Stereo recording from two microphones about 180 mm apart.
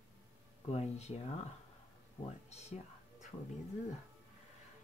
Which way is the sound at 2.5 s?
40° left (ahead or behind).